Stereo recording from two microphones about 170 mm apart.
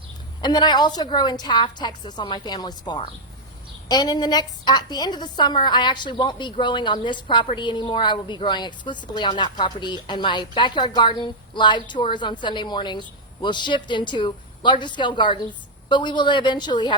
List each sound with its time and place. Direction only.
0.4 s a woman's voice: 25° left (ahead or behind)